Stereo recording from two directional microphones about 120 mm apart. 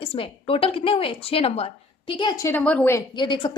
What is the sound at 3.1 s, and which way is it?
Speech, 40° left (ahead or behind).